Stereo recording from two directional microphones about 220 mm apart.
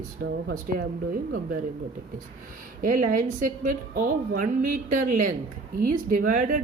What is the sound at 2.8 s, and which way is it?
A woman's voice, 35° right (ahead or behind).